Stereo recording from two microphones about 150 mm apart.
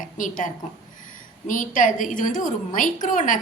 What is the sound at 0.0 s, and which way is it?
A woman's voice, 60° left (ahead or behind).